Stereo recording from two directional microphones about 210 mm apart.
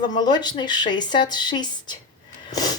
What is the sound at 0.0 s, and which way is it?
A woman's voice, 20° left (ahead or behind).